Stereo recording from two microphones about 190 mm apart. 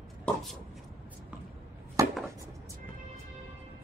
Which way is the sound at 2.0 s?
15° right (ahead or behind).